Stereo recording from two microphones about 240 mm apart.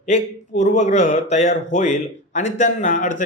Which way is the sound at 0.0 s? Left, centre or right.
Left.